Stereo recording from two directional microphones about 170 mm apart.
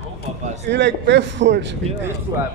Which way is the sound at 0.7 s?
90° right.